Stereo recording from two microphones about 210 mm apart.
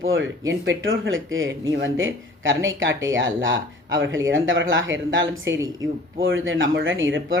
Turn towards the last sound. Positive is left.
turn(degrees=-65)  # may be behind; listen again after turning